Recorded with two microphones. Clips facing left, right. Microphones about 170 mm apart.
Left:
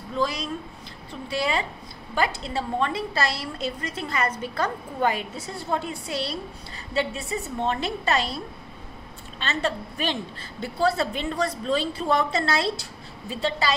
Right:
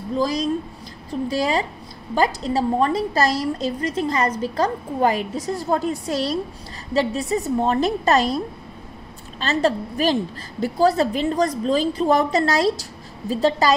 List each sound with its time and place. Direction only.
0.1 s a woman's voice: 40° right (ahead or behind)
9.4 s a woman's voice: 40° right (ahead or behind)